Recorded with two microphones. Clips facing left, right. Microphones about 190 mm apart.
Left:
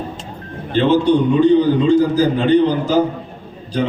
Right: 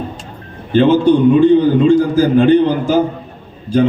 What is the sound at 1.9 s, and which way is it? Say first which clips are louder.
A man's voice: right 2 dB; 50° right (ahead or behind).